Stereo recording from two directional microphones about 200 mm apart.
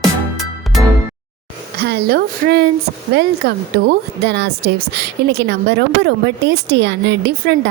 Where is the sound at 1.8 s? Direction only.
55° right (ahead or behind).